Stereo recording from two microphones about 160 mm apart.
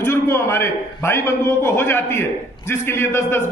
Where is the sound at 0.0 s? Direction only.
15° left (ahead or behind).